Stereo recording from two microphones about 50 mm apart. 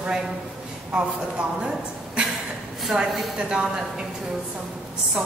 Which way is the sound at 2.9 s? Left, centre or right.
Centre.